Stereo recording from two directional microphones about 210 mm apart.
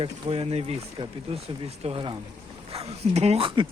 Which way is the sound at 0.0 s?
30° right (ahead or behind).